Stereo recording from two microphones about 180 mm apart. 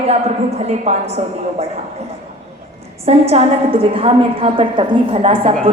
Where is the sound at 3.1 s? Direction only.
35° right (ahead or behind).